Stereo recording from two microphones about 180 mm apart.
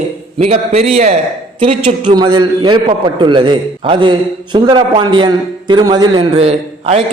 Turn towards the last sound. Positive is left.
turn(degrees=-35)  # may be behind; listen again after turning